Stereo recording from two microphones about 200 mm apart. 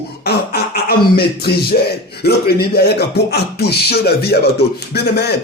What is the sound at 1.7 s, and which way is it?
Speech, 40° left (ahead or behind).